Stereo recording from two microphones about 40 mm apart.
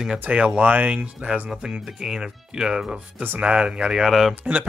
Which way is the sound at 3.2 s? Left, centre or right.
Right.